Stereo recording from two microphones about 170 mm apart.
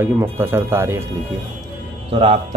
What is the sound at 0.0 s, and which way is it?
Speech, 15° right (ahead or behind).